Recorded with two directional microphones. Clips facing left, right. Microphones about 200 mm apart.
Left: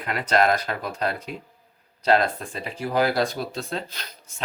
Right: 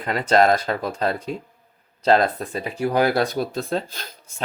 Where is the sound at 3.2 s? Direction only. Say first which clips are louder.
Right 3 dB; 55° right (ahead or behind).